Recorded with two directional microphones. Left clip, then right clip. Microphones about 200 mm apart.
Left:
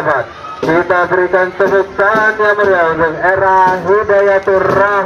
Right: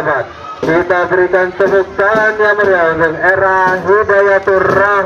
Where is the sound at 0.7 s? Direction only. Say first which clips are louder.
Even; 40° right (ahead or behind).